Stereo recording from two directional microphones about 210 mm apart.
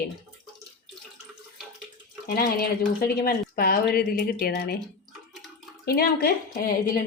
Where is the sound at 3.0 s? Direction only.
45° left (ahead or behind).